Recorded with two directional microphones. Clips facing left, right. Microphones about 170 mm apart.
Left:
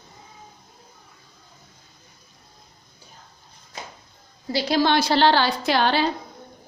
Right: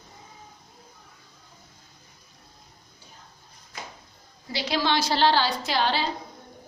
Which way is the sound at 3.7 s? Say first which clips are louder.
Left 2 dB; 25° left (ahead or behind).